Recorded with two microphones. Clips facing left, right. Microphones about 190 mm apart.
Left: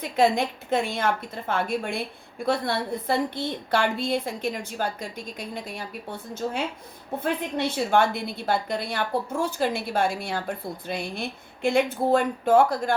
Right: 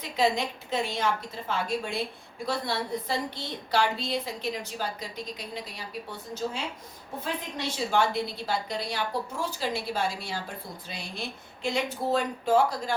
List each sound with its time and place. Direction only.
0.0 s a woman's voice: 55° left (ahead or behind)